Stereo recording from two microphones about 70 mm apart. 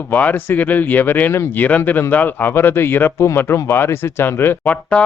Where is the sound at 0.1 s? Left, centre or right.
Left.